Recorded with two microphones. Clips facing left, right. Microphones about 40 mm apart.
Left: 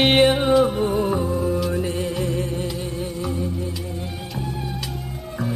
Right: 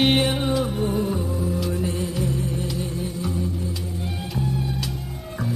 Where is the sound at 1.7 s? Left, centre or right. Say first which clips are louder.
Left 2 dB; left.